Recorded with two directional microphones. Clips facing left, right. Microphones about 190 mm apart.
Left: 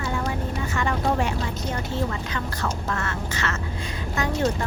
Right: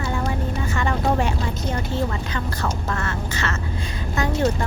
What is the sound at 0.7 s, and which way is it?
Vehicle, 30° right (ahead or behind).